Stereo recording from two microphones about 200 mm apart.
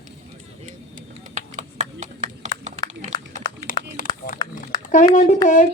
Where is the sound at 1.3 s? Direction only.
35° right (ahead or behind).